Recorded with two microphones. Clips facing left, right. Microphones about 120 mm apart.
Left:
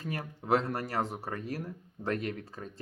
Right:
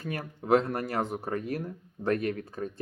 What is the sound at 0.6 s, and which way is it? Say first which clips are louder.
Speech: right 2 dB; 30° left (ahead or behind).